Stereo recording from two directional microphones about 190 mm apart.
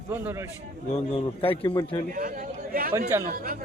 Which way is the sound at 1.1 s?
30° left (ahead or behind).